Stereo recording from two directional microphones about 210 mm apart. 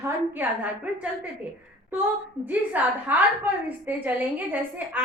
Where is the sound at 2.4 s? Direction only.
10° right (ahead or behind).